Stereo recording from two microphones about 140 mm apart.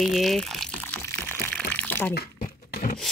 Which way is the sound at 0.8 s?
15° left (ahead or behind).